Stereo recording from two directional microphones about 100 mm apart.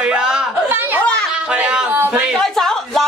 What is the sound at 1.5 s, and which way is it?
Speech, 15° right (ahead or behind).